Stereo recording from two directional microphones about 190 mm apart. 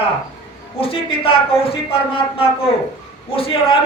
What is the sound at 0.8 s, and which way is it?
A woman's voice, 30° left (ahead or behind).